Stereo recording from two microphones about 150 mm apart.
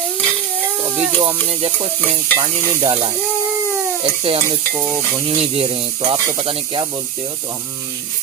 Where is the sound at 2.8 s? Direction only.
35° right (ahead or behind).